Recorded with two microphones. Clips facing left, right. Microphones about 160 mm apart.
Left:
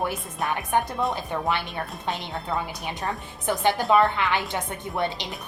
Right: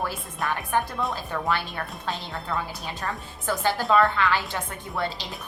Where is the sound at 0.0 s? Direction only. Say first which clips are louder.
Left 2 dB; 20° left (ahead or behind).